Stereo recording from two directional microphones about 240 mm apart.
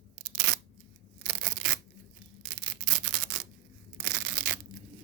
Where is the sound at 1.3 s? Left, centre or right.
Right.